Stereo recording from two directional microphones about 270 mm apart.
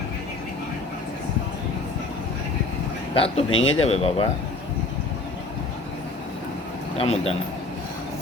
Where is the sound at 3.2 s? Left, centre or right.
Left.